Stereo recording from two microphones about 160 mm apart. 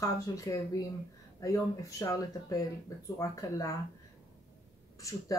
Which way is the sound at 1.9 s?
20° left (ahead or behind).